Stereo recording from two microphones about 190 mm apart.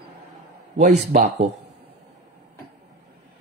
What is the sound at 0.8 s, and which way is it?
Speech, 40° right (ahead or behind).